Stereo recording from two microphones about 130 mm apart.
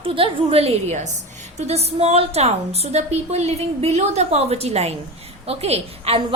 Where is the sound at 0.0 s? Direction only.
45° right (ahead or behind).